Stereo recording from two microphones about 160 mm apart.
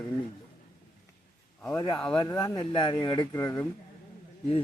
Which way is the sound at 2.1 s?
25° left (ahead or behind).